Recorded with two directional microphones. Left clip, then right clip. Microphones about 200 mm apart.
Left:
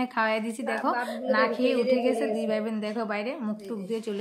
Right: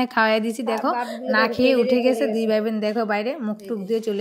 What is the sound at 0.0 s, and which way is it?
A woman's voice, 30° right (ahead or behind).